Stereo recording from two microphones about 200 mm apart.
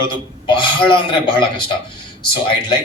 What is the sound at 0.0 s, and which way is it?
Speech, 25° left (ahead or behind).